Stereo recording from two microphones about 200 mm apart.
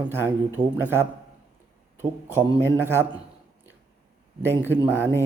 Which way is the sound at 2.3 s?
10° right (ahead or behind).